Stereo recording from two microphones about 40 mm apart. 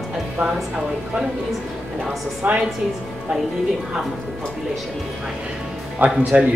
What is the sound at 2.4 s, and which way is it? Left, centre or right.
Speech, right.